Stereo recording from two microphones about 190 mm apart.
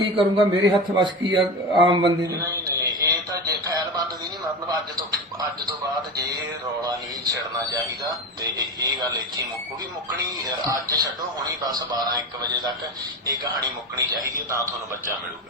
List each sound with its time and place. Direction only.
0.0 s a man's voice: 25° right (ahead or behind)
1.9 s a sound: 25° right (ahead or behind)
6.8 s a sound: 20° right (ahead or behind)
8.5 s a man's voice: 20° right (ahead or behind)
10.7 s a man's voice: 20° right (ahead or behind)
14.5 s a man's voice: 15° right (ahead or behind)